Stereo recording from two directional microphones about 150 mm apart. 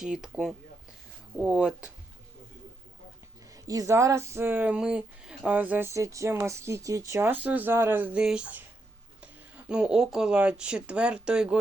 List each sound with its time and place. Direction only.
0.0 s speech: 5° right (ahead or behind)
3.5 s speech: 20° right (ahead or behind); by 11.6 s 5° right (ahead or behind)